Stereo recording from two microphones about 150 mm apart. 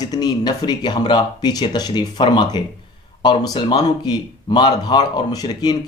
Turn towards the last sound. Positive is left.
turn(degrees=25)  # may be behind; listen again after turning